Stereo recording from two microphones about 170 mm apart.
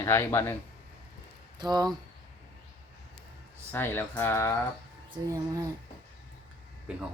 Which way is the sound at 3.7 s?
10° left (ahead or behind).